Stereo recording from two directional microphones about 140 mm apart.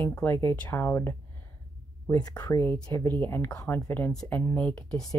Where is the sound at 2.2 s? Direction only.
25° left (ahead or behind).